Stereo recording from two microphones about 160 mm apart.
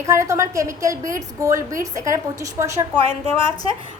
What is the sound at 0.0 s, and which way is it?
A woman's voice, 20° right (ahead or behind).